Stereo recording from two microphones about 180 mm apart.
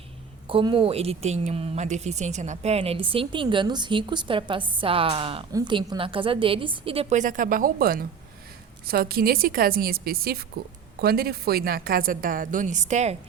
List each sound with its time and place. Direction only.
0.4 s a woman's voice: 30° right (ahead or behind)